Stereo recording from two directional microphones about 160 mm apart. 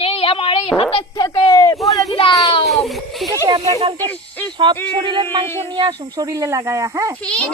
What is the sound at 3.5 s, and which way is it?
Speech, 25° right (ahead or behind).